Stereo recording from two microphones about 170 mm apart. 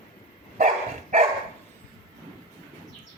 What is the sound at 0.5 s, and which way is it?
Dog, 45° right (ahead or behind).